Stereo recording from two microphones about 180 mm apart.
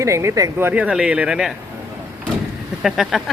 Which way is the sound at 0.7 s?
5° right (ahead or behind).